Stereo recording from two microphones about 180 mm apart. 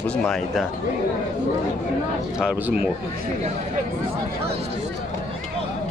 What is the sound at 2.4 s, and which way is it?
Speech, 5° right (ahead or behind).